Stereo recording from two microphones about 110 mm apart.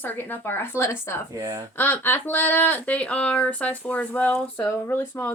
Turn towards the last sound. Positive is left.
turn(degrees=20)  # may be behind; listen again after turning